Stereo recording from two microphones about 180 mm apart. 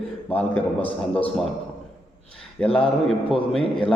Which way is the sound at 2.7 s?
5° left (ahead or behind).